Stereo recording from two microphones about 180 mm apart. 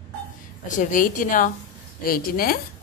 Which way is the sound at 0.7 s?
45° left (ahead or behind).